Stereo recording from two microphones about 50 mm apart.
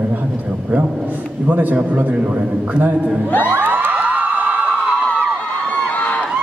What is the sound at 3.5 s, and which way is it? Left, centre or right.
Crowd, right.